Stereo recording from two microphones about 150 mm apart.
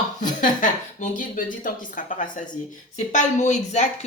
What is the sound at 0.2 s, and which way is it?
A woman's voice, 60° left (ahead or behind).